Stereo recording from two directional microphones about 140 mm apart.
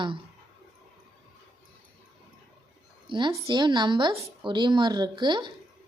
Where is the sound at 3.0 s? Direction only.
35° right (ahead or behind).